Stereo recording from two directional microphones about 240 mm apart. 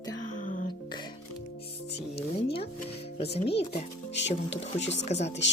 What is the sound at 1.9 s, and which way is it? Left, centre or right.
Music, left.